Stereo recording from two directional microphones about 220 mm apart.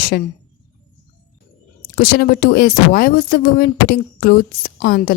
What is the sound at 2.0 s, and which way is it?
Speech, 45° left (ahead or behind).